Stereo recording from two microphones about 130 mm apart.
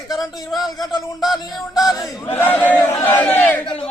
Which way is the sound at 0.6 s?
30° left (ahead or behind).